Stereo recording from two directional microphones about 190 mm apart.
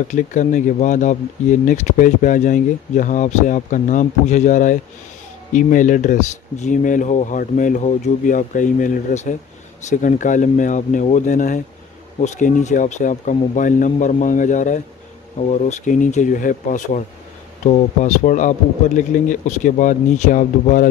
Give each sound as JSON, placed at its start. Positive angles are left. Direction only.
{"t": 0.1, "sound": "speech", "side_deg": 40}